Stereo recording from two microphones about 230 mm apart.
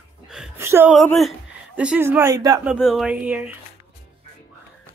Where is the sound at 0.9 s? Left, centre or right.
Centre.